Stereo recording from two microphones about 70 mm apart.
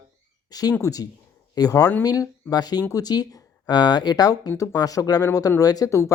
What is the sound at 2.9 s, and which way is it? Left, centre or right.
Speech, left.